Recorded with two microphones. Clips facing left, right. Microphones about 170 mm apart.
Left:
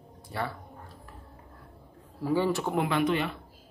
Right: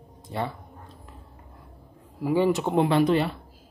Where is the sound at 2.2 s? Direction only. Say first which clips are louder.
Right 4 dB; 15° right (ahead or behind); by 3.3 s 35° right (ahead or behind).